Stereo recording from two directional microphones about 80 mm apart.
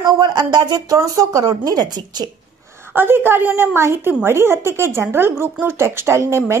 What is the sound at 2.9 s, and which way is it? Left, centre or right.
A woman's voice, right.